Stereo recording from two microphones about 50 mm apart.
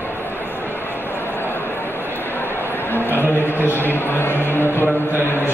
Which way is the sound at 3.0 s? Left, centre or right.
Right.